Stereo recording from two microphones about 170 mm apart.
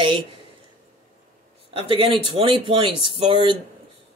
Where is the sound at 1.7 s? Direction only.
35° right (ahead or behind).